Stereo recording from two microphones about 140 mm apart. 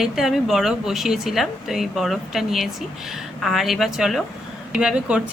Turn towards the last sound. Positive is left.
turn(degrees=-5)  # may be behind; listen again after turning